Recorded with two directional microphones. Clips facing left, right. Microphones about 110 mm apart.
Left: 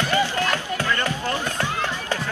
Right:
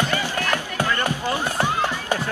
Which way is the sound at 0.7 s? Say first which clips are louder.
Right 1 dB; 15° right (ahead or behind).